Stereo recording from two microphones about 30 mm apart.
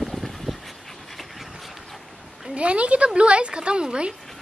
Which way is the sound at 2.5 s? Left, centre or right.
Right.